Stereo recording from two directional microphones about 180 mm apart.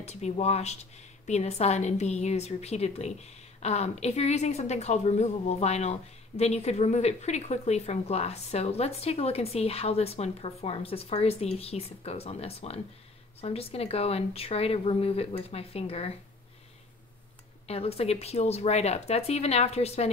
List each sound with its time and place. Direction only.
0.0 s a woman's voice: 35° left (ahead or behind)
17.6 s a woman's voice: 35° left (ahead or behind)